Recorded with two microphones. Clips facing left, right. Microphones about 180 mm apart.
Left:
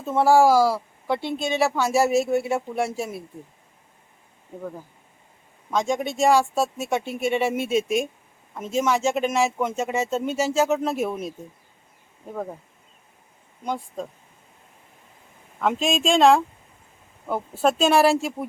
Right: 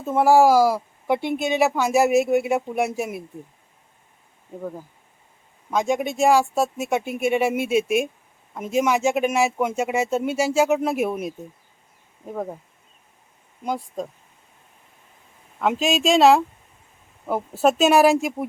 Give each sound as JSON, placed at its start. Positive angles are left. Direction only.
{"t": 0.0, "sound": "speech", "side_deg": -10}
{"t": 5.7, "sound": "speech", "side_deg": -5}
{"t": 13.7, "sound": "speech", "side_deg": -15}
{"t": 15.5, "sound": "speech", "side_deg": -5}
{"t": 17.6, "sound": "speech", "side_deg": -5}